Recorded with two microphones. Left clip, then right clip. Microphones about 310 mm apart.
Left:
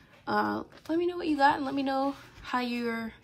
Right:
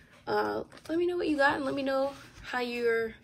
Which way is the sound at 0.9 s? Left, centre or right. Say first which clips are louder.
Right 1 dB; centre.